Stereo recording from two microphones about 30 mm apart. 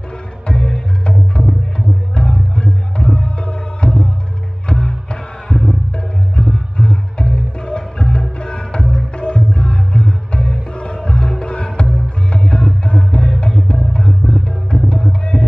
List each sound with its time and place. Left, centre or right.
0.5 s music: left